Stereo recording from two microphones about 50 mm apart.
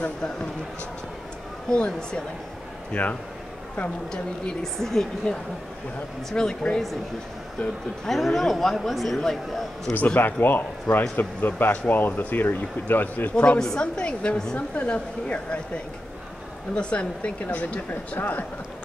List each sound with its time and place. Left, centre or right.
0.0 s a woman's voice: centre
1.9 s a woman's voice: centre
2.9 s speech: left
4.1 s a woman's voice: centre
8.1 s a man's voice: centre
9.9 s speech: left
16.7 s speech: left